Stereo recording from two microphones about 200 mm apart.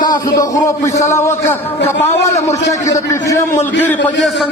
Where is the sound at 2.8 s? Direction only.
15° left (ahead or behind).